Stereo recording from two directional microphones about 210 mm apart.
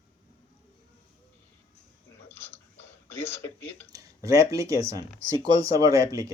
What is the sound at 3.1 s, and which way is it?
Speech, 10° left (ahead or behind).